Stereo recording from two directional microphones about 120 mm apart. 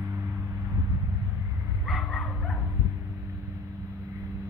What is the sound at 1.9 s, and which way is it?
Bow-wow, 5° left (ahead or behind).